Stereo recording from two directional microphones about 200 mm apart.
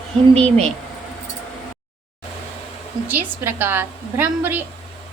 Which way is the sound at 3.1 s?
10° right (ahead or behind).